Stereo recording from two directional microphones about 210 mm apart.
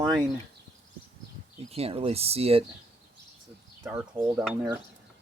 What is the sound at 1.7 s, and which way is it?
Speech, 30° right (ahead or behind).